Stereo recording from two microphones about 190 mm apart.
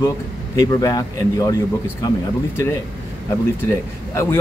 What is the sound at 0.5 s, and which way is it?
Speech, 20° left (ahead or behind).